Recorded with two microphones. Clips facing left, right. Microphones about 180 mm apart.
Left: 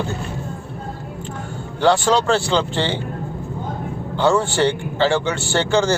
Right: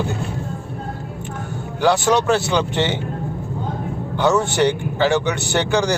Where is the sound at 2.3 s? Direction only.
20° right (ahead or behind).